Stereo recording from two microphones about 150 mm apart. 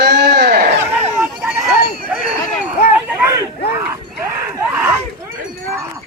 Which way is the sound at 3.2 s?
20° right (ahead or behind).